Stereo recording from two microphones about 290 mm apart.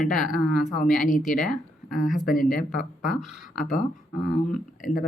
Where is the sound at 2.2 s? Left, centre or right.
Left.